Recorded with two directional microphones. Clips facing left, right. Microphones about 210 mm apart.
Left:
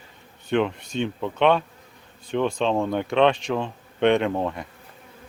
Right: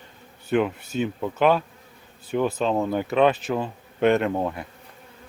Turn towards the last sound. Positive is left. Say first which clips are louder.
# even
turn(degrees=-5)  # may be behind; listen again after turning